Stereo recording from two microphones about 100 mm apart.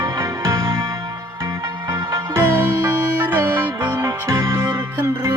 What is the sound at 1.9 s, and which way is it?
Music, 30° right (ahead or behind).